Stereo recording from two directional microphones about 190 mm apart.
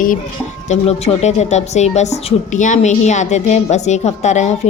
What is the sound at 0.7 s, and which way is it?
A woman's voice, 35° left (ahead or behind).